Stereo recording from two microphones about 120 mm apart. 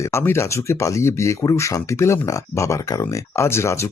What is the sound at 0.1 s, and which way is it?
Speech, 20° left (ahead or behind).